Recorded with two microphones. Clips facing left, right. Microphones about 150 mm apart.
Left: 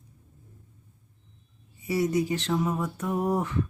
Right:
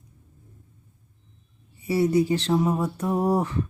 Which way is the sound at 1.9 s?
30° right (ahead or behind).